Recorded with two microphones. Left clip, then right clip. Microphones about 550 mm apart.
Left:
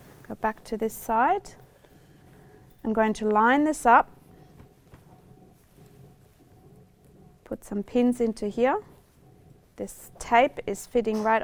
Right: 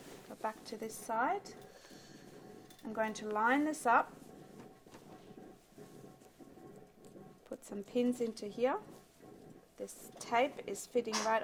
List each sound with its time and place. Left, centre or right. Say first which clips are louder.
0.3 s a woman's voice: left 12 dB; left
2.8 s a woman's voice: left 13 dB; left
7.4 s a woman's voice: left 12 dB; left